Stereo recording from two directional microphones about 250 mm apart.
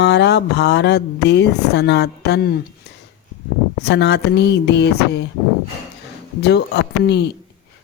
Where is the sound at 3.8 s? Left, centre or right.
Left.